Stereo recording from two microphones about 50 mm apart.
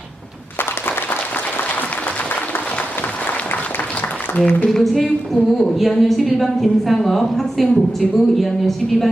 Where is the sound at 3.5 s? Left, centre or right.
Left.